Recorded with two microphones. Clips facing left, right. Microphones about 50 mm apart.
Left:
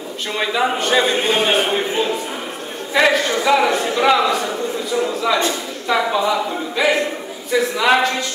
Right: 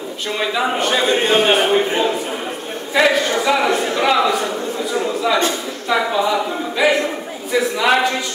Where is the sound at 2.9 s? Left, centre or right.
Centre.